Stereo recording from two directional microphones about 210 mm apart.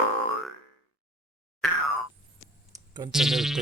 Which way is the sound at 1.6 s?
Centre (ahead or behind).